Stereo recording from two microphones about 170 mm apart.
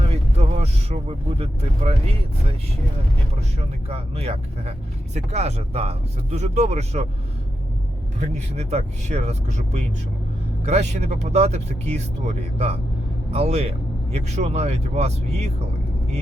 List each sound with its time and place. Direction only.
0.1 s vehicle: 40° right (ahead or behind)
3.8 s speech: 35° right (ahead or behind)
8.2 s speech: 40° right (ahead or behind)